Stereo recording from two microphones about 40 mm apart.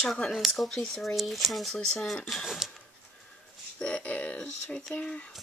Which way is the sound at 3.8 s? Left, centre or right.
Left.